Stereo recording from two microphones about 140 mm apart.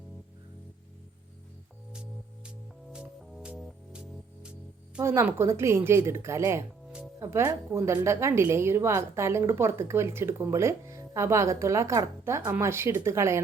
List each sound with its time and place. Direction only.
2.9 s music: 5° right (ahead or behind)
4.9 s a woman's voice: 20° right (ahead or behind)